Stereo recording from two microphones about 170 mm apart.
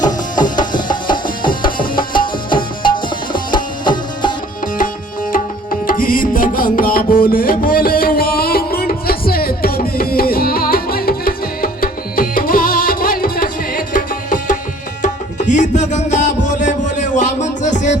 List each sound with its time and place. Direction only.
1.4 s music: 55° left (ahead or behind)
1.8 s tabla: 30° left (ahead or behind)
3.5 s music: 25° left (ahead or behind)
5.8 s music: 55° left (ahead or behind)